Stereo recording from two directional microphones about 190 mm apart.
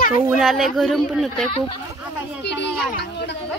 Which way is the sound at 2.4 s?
65° left (ahead or behind).